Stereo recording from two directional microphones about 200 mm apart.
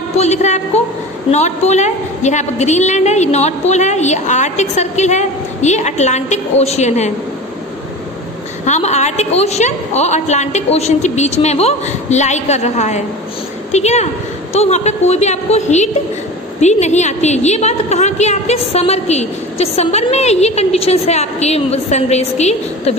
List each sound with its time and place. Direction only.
0.2 s a woman's voice: 35° left (ahead or behind)
8.6 s a woman's voice: 35° left (ahead or behind)